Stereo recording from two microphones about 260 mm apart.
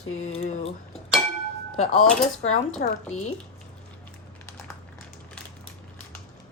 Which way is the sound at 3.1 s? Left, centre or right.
Left.